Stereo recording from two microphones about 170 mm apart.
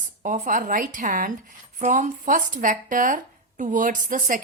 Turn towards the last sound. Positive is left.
turn(degrees=-50)  # may be behind; listen again after turning